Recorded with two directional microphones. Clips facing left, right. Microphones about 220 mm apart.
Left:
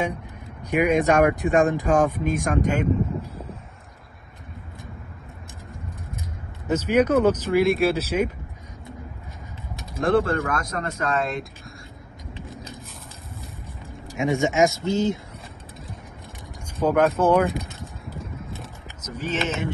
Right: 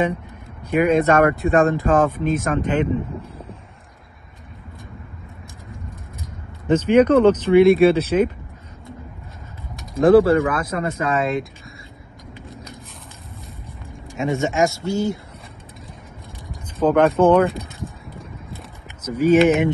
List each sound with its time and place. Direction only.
0.7 s speech: 15° left (ahead or behind)
6.7 s speech: 10° left (ahead or behind)
9.9 s speech: 5° right (ahead or behind)
14.1 s speech: 15° left (ahead or behind)
16.8 s a sound: 5° left (ahead or behind); by 19.7 s 15° right (ahead or behind)